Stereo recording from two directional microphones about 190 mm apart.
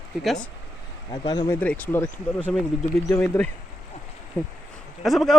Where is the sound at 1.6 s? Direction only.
10° left (ahead or behind).